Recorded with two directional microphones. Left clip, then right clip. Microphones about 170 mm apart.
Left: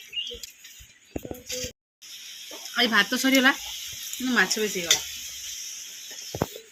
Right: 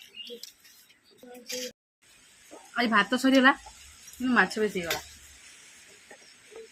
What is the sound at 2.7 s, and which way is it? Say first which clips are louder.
A woman's voice: left 3 dB; 15° right (ahead or behind).